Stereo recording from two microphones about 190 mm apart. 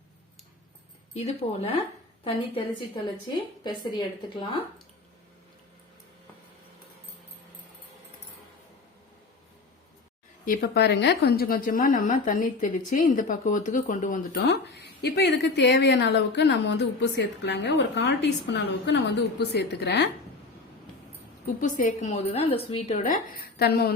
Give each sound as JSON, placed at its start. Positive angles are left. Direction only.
{"t": 1.1, "sound": "a woman's voice", "side_deg": 30}
{"t": 10.4, "sound": "a woman's voice", "side_deg": 50}
{"t": 14.4, "sound": "a woman's voice", "side_deg": 65}
{"t": 21.4, "sound": "a woman's voice", "side_deg": 45}